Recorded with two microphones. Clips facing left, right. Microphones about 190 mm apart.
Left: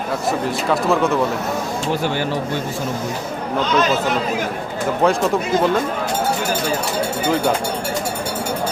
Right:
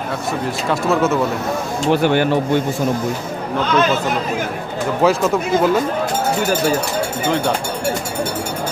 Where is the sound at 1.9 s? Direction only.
60° right (ahead or behind).